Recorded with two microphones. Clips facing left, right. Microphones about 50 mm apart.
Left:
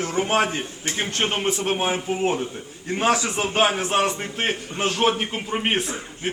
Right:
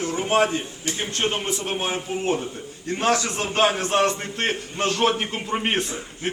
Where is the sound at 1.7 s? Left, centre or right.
Centre.